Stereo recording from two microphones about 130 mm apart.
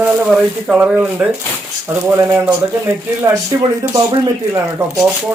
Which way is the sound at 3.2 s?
25° right (ahead or behind).